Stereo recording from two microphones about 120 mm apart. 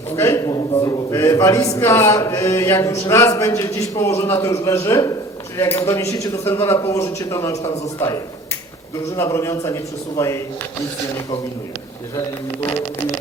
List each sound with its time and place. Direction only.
0.2 s speech: 25° left (ahead or behind)